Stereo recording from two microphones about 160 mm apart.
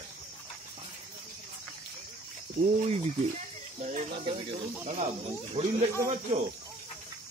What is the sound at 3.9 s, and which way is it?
Speech, 35° right (ahead or behind).